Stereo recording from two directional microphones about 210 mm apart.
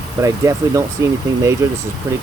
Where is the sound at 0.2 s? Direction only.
15° right (ahead or behind).